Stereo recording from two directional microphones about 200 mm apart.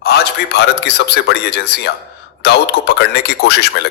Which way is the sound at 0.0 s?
55° left (ahead or behind).